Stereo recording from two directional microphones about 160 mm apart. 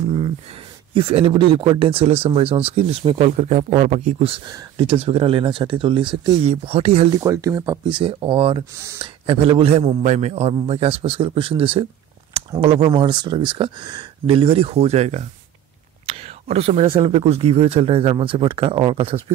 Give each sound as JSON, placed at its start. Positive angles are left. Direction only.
{"t": 0.9, "sound": "speech", "side_deg": -35}
{"t": 4.5, "sound": "speech", "side_deg": -25}
{"t": 4.8, "sound": "speech", "side_deg": -35}
{"t": 7.2, "sound": "speech", "side_deg": -20}
{"t": 8.7, "sound": "speech", "side_deg": -20}
{"t": 9.0, "sound": "speech", "side_deg": -35}